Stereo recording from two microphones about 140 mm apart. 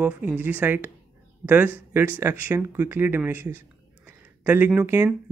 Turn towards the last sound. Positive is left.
turn(degrees=-15)  # may be behind; listen again after turning